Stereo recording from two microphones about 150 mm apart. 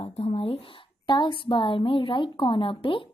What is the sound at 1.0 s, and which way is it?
Speech, 30° left (ahead or behind).